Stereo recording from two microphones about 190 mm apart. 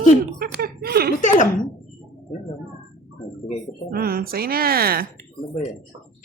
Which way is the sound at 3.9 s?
50° right (ahead or behind).